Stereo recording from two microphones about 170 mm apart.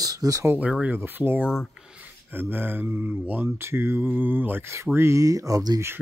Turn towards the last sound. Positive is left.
turn(degrees=-20)  # may be behind; listen again after turning